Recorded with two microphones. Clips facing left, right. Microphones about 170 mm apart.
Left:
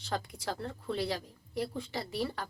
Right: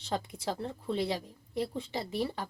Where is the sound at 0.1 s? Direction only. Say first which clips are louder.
Right 2 dB; 20° right (ahead or behind).